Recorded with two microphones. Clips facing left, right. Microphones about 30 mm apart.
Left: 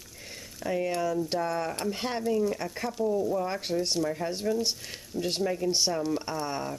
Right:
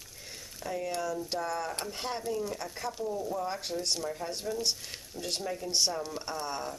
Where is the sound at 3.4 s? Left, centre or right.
Centre.